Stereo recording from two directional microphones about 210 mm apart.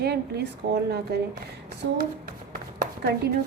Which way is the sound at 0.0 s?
50° right (ahead or behind).